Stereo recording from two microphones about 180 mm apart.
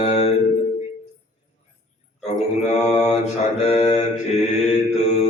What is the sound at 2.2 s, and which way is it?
Mantra, 40° left (ahead or behind).